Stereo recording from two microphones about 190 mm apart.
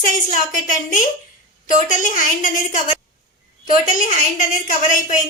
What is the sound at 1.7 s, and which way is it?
A woman's voice, 40° left (ahead or behind).